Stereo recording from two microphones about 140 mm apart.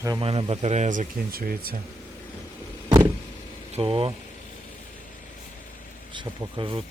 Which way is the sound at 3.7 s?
40° right (ahead or behind).